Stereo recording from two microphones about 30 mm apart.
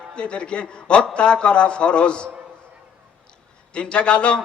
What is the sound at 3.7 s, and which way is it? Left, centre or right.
Speech, left.